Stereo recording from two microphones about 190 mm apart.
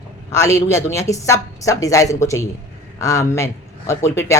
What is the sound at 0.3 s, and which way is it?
Speech, 15° left (ahead or behind).